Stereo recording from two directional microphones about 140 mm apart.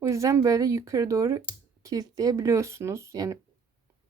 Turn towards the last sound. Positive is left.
turn(degrees=-20)  # may be behind; listen again after turning